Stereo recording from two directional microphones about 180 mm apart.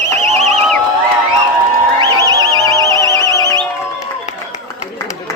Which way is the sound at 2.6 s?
15° left (ahead or behind).